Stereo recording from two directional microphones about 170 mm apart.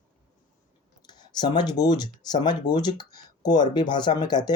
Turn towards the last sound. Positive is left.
turn(degrees=25)  # may be behind; listen again after turning